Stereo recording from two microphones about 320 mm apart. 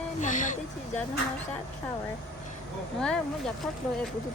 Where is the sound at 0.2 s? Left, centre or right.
Left.